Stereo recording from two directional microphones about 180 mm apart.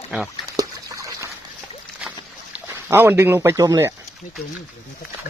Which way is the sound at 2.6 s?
15° right (ahead or behind).